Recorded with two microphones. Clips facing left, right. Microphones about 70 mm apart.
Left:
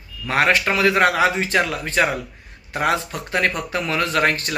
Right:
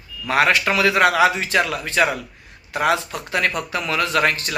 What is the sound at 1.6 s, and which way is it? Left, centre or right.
Speech, right.